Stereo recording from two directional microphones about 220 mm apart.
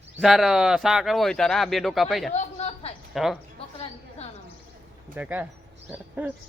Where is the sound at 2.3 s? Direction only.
30° left (ahead or behind).